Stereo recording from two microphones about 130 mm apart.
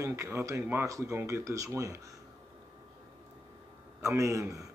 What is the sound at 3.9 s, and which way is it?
Speech, 25° right (ahead or behind).